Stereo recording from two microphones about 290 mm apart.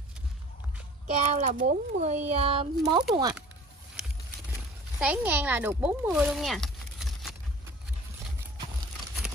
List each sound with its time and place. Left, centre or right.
1.2 s speech: right
5.0 s speech: centre